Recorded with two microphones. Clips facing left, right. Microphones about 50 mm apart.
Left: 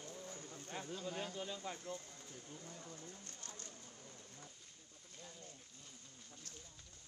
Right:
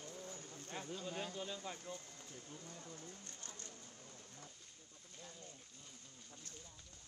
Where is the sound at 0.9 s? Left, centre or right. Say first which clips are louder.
Even; centre.